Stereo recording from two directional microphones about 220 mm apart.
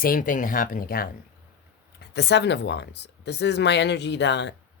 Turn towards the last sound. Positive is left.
turn(degrees=50)  # may be behind; listen again after turning